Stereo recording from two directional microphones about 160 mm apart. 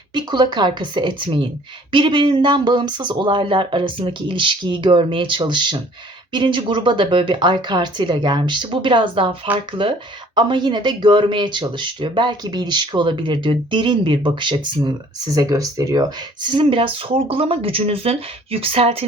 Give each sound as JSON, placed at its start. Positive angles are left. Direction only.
{"t": 0.1, "sound": "speech", "side_deg": -25}
{"t": 10.3, "sound": "speech", "side_deg": -30}